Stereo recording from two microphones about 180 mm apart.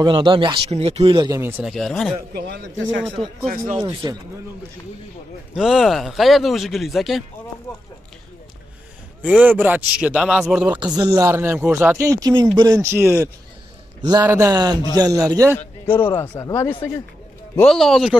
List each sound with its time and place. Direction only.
0.0 s speech: 25° right (ahead or behind)
1.4 s a man's voice: centre (ahead or behind)
2.3 s speech: 70° right (ahead or behind)
3.2 s speech: 30° right (ahead or behind)
5.5 s a man's voice: centre (ahead or behind)
9.2 s a man's voice: 5° right (ahead or behind)
10.8 s speech: 20° right (ahead or behind)
16.2 s speech: 15° left (ahead or behind)
17.6 s a man's voice: 5° left (ahead or behind)